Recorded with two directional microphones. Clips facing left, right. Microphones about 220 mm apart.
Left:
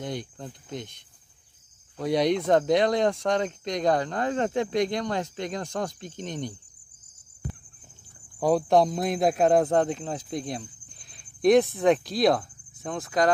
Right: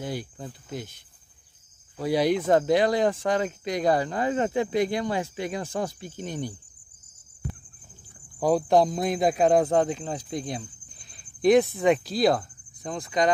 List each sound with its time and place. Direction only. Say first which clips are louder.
0.0 s speech: right 1 dB; 5° right (ahead or behind)
8.4 s speech: even; centre (ahead or behind)